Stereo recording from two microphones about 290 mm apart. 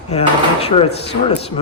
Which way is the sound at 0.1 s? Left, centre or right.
Left.